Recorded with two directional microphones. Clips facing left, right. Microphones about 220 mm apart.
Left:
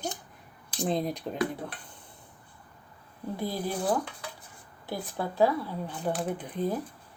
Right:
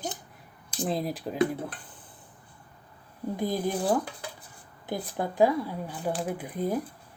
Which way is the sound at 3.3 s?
15° right (ahead or behind).